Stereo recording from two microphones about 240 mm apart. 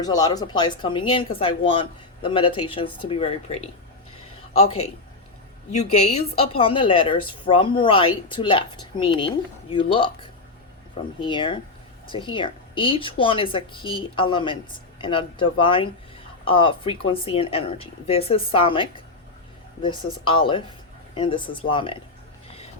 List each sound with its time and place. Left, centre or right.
0.0 s a woman's voice: centre